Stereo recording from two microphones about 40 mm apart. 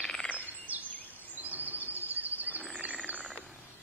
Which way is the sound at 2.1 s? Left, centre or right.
Right.